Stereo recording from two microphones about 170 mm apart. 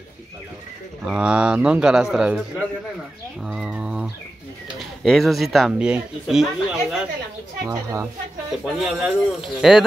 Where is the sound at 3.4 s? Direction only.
5° right (ahead or behind).